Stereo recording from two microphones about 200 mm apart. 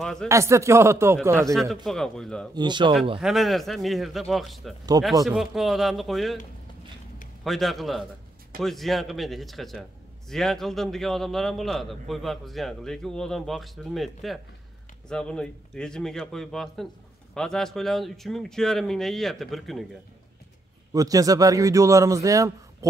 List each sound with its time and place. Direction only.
0.0 s speech: 5° left (ahead or behind)
0.3 s a man's voice: 15° right (ahead or behind)
1.5 s speech: centre (ahead or behind)
2.5 s speech: 20° right (ahead or behind)
3.2 s speech: centre (ahead or behind)
7.4 s speech: centre (ahead or behind)
20.9 s a man's voice: 15° right (ahead or behind)